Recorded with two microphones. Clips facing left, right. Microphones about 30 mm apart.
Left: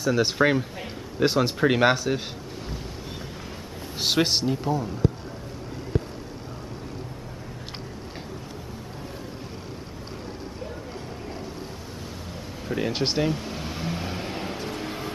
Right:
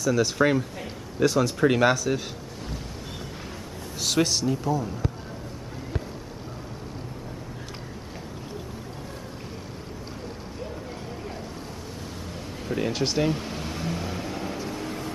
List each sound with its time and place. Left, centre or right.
0.0 s speech: left
0.4 s speech: centre
1.2 s speech: left
1.6 s speech: left
4.0 s speech: left
5.0 s a sound: centre
12.6 s a sound: centre
12.9 s speech: left
13.2 s speech: centre
13.7 s vehicle: centre
14.1 s vehicle: left